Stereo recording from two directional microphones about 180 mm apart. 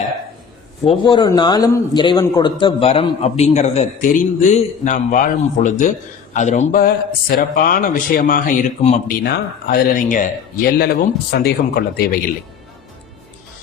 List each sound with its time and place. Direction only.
0.9 s a man's voice: 25° left (ahead or behind); by 10.2 s 50° left (ahead or behind)
10.8 s speech: 65° left (ahead or behind)